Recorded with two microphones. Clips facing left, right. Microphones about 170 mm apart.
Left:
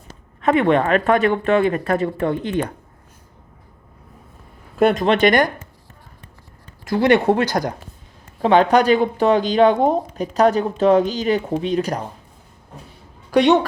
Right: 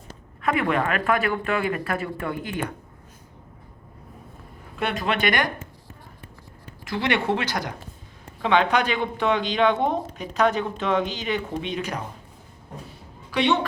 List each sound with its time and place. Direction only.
0.4 s speech: 30° left (ahead or behind)
4.8 s speech: 45° left (ahead or behind)
6.8 s speech: 40° left (ahead or behind)
13.3 s speech: 45° left (ahead or behind)